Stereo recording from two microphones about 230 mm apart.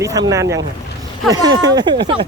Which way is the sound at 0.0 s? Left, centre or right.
Centre.